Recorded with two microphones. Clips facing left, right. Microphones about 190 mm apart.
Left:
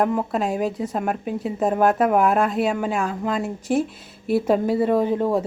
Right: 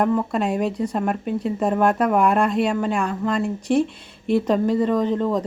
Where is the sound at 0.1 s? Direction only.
5° left (ahead or behind).